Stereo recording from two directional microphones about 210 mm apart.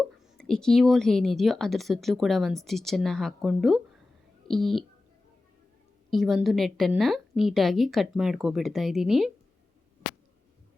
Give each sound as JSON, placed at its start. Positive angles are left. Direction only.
{"t": 0.3, "sound": "a woman's voice", "side_deg": 5}
{"t": 6.1, "sound": "a woman's voice", "side_deg": 0}